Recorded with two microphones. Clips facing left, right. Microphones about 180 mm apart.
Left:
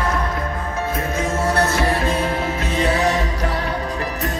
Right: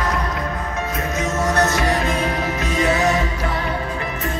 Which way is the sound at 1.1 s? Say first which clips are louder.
Right 1 dB; 30° left (ahead or behind).